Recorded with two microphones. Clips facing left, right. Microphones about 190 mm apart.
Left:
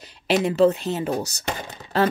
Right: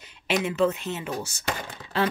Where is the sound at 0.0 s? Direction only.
35° left (ahead or behind).